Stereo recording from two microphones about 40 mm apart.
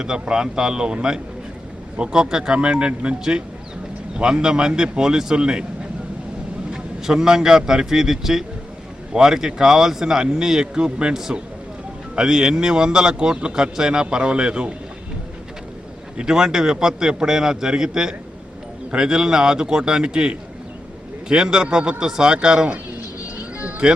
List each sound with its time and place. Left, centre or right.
0.0 s a man's voice: centre
2.0 s a man's voice: right
4.2 s a man's voice: centre
6.7 s a man's voice: centre
11.1 s a man's voice: centre
16.1 s a man's voice: centre
23.6 s music: right